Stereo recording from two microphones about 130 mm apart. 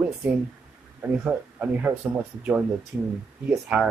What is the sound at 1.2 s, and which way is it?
Speech, 10° right (ahead or behind).